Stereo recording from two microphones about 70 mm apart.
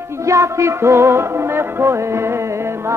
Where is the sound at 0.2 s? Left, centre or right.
Right.